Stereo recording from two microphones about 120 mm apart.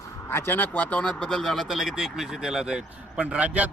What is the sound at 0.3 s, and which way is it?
Speech, 15° left (ahead or behind).